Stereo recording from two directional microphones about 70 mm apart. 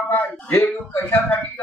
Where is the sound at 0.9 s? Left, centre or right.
Left.